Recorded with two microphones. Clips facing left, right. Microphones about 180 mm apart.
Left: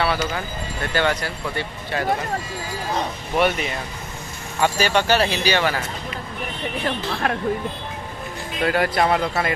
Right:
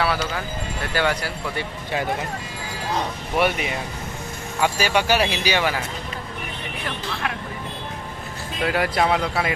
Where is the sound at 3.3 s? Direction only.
10° right (ahead or behind).